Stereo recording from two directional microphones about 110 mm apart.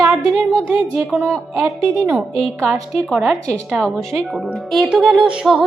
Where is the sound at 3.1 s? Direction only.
Centre (ahead or behind).